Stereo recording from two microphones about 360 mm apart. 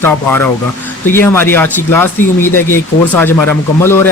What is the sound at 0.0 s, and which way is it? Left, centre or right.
Speech, centre.